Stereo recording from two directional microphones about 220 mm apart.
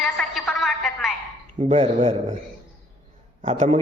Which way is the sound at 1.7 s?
30° right (ahead or behind).